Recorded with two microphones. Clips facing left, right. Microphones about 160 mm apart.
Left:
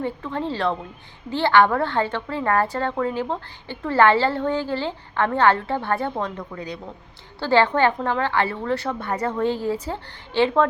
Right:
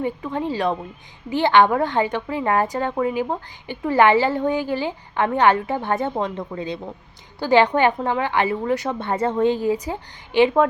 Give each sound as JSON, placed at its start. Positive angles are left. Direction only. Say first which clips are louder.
{"t": 0.0, "sound": "a woman's voice", "louder": "right 2 dB", "side_deg": -15}